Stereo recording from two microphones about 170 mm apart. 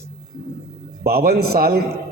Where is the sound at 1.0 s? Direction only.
60° right (ahead or behind).